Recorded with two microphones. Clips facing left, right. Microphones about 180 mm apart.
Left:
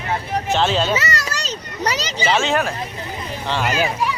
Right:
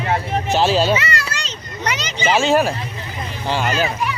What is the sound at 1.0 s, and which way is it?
Children playing, 40° left (ahead or behind).